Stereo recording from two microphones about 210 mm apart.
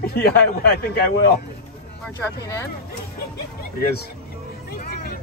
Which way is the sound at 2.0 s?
15° left (ahead or behind).